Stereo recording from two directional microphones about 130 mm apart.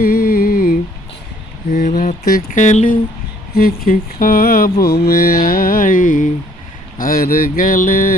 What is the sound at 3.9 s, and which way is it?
Mantra, 90° left.